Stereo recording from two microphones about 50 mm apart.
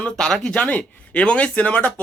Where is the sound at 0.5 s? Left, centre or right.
Left.